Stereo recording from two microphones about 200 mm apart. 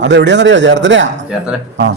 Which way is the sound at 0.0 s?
65° right (ahead or behind).